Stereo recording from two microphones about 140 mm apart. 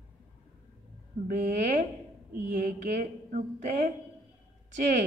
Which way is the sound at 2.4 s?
70° right (ahead or behind).